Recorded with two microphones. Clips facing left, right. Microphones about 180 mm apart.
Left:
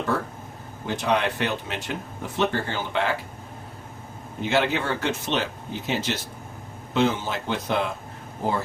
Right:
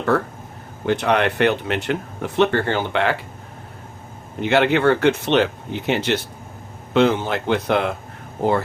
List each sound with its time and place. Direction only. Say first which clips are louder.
0.9 s speech: right 5 dB; 65° right (ahead or behind)
4.4 s speech: right 6 dB; 65° right (ahead or behind)